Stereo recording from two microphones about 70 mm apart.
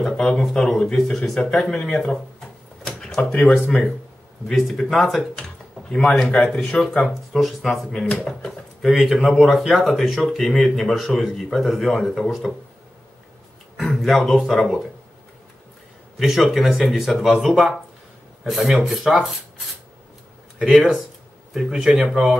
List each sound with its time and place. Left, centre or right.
0.0 s speech: centre
2.8 s a sound: centre
3.2 s speech: centre
4.5 s speech: centre
8.9 s speech: centre
13.7 s speech: centre
16.2 s speech: centre
20.5 s speech: centre